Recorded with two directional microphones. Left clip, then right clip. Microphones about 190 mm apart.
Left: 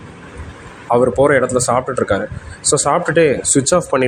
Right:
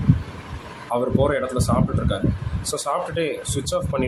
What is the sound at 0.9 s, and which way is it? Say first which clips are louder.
Speech: left 9 dB; 35° left (ahead or behind).